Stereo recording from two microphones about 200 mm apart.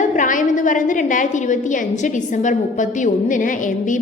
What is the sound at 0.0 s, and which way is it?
A woman's voice, 40° left (ahead or behind).